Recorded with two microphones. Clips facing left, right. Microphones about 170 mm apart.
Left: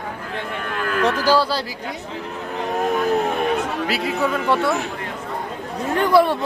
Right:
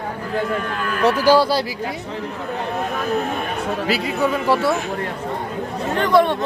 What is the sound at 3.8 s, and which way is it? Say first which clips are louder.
Speech: right 4 dB; centre (ahead or behind).